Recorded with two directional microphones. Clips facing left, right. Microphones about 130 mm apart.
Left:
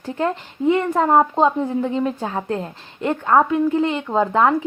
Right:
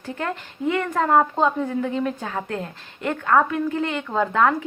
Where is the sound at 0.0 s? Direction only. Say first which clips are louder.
Left 6 dB; 25° left (ahead or behind).